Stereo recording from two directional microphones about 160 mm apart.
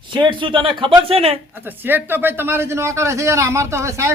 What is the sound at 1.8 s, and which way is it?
Speech, 10° right (ahead or behind).